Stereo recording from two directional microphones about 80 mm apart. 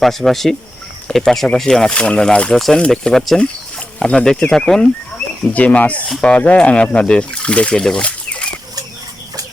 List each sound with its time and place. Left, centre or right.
0.0 s speech: centre
5.5 s speech: centre